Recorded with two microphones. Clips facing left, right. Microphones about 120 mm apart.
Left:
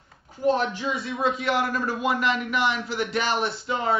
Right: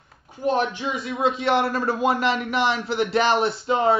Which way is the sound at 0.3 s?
20° right (ahead or behind).